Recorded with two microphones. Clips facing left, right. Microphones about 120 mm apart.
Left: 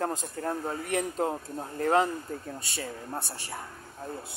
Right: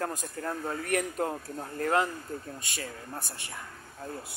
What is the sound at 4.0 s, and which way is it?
Speech, 20° left (ahead or behind).